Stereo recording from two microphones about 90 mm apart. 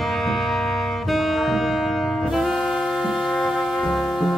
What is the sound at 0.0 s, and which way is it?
Music, centre (ahead or behind).